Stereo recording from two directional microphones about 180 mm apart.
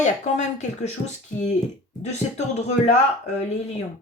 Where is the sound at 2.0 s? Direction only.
40° left (ahead or behind).